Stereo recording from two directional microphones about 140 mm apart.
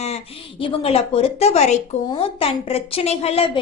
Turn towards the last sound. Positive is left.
turn(degrees=45)  # may be behind; listen again after turning